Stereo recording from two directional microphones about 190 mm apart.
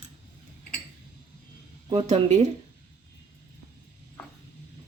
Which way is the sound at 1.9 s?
35° right (ahead or behind).